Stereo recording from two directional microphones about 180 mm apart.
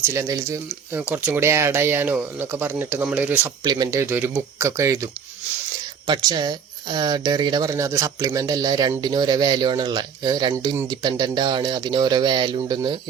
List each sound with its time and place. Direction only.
0.0 s speech: 15° right (ahead or behind)
6.1 s speech: 25° right (ahead or behind)